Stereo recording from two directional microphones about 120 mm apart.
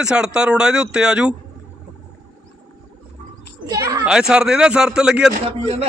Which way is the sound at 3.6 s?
30° right (ahead or behind).